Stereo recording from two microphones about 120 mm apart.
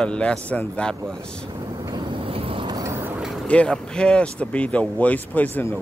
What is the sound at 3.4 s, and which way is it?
Speech, 10° left (ahead or behind).